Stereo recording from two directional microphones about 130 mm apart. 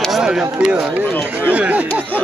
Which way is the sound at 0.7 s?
10° right (ahead or behind).